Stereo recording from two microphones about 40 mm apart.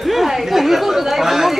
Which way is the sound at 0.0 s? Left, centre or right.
Centre.